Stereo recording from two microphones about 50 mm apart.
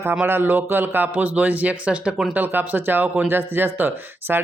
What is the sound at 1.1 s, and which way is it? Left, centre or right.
Speech, right.